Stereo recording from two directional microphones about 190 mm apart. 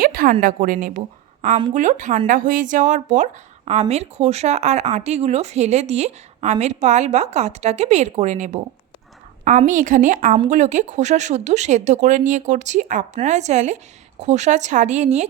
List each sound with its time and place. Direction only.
0.0 s a woman's voice: 45° right (ahead or behind)